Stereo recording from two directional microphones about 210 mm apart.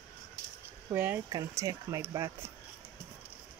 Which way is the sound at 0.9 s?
10° right (ahead or behind).